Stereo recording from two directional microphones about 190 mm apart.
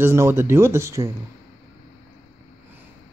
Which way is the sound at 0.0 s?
15° right (ahead or behind).